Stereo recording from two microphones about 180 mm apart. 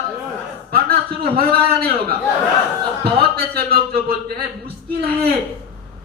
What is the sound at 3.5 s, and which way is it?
A man's voice, 55° right (ahead or behind).